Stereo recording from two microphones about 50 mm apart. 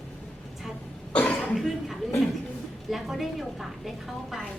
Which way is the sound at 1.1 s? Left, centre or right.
Left.